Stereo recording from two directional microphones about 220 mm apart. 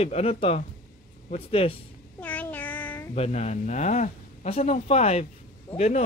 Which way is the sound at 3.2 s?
30° left (ahead or behind).